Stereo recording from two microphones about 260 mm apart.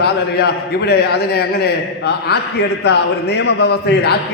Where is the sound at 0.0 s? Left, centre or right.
Left.